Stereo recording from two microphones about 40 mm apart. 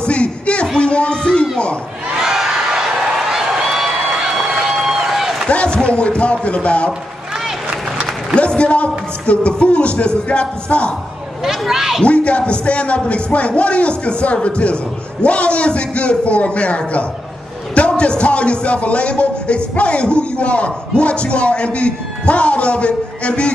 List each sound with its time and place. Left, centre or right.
0.0 s a sound: left
0.7 s music: left
2.2 s crowd: centre
5.8 s speech: left
8.4 s speech: left
11.4 s speech: centre
12.0 s speech: left